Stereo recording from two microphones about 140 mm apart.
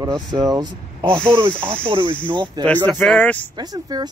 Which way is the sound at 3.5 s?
30° right (ahead or behind).